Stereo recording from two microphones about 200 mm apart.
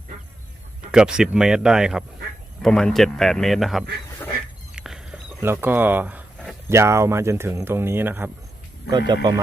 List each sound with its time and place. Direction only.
0.9 s speech: 5° right (ahead or behind)
4.7 s a sound: 5° right (ahead or behind)
6.7 s speech: 15° right (ahead or behind)
8.9 s speech: 20° right (ahead or behind)